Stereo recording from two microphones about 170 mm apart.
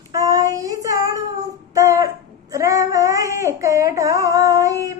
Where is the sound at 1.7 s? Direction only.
20° right (ahead or behind).